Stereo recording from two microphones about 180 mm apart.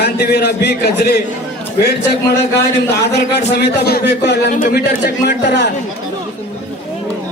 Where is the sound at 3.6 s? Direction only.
65° left (ahead or behind).